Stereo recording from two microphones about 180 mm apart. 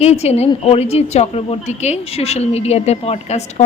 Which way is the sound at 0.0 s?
35° left (ahead or behind).